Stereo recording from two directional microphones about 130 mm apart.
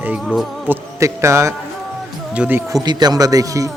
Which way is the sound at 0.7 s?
25° right (ahead or behind).